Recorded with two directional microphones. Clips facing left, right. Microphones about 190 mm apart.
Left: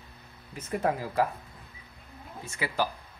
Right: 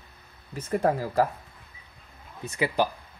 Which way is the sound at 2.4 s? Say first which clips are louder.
Right 5 dB; 20° right (ahead or behind).